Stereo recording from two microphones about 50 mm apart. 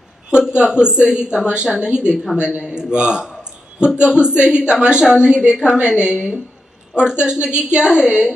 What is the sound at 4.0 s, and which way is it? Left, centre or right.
A woman's voice, centre.